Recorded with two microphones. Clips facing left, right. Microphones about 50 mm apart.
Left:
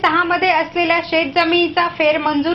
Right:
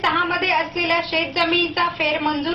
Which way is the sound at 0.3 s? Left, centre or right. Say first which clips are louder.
Left 5 dB; left.